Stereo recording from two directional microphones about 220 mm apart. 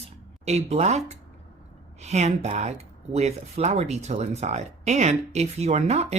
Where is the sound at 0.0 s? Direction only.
30° right (ahead or behind).